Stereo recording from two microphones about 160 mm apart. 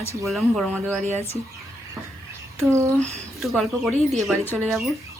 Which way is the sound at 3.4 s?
Centre (ahead or behind).